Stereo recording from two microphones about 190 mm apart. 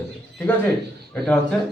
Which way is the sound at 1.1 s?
5° left (ahead or behind).